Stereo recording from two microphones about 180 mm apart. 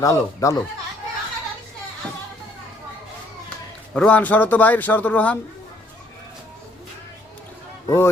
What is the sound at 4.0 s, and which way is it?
A man's voice, 5° left (ahead or behind).